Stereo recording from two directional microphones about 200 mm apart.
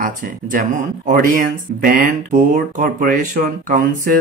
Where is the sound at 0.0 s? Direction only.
40° right (ahead or behind).